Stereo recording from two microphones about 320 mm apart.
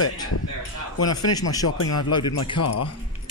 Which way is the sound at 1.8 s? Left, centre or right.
Left.